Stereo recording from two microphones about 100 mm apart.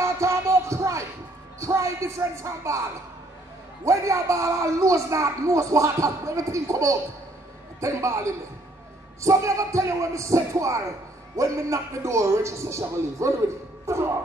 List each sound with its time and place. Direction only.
0.0 s a sound: 30° right (ahead or behind)
1.6 s a man's voice: 30° right (ahead or behind)
3.8 s a man's voice: 30° right (ahead or behind)